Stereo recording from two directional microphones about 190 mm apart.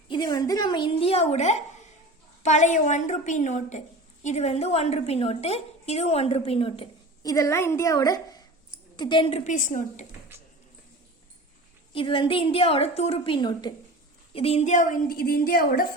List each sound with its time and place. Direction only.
0.1 s a woman's voice: 20° left (ahead or behind)
9.5 s a woman's voice: 45° left (ahead or behind)
11.9 s a woman's voice: 25° left (ahead or behind); by 15.9 s 50° left (ahead or behind)